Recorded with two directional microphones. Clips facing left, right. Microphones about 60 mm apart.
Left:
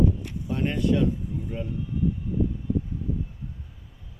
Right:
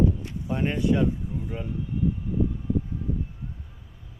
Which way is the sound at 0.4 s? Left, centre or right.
Centre.